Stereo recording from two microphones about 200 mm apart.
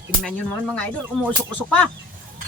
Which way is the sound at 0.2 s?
5° left (ahead or behind).